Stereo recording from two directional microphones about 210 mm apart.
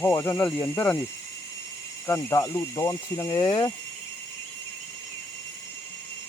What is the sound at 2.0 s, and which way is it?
Speech, 15° left (ahead or behind).